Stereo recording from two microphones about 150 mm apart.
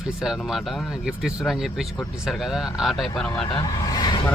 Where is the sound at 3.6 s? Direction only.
25° left (ahead or behind).